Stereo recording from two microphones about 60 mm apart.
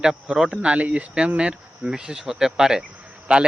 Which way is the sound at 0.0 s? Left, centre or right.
Centre.